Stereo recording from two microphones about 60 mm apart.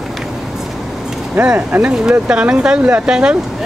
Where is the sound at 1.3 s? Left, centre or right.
Right.